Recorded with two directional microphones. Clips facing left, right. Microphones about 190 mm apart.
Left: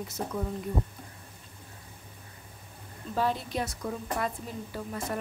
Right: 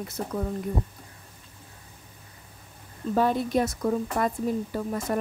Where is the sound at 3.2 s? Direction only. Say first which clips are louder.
Right 6 dB; 50° right (ahead or behind).